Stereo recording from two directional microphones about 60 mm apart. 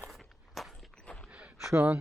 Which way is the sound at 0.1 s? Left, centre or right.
Centre.